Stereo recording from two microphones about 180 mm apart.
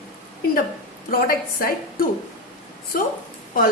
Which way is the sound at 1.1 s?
55° left (ahead or behind).